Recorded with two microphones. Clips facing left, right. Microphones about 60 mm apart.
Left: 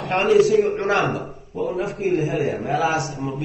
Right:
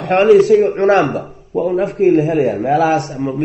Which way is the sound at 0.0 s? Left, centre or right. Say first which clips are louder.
Right 7 dB; right.